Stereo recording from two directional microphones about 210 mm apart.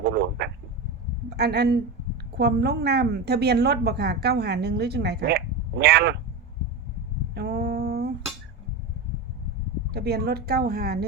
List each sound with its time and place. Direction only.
0.0 s a man's voice: 55° right (ahead or behind)
7.3 s a sound: 50° right (ahead or behind)
9.9 s a woman's voice: 50° right (ahead or behind)